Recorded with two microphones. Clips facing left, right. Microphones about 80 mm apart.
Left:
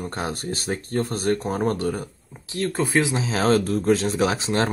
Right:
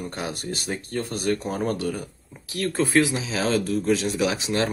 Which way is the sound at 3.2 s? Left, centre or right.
Left.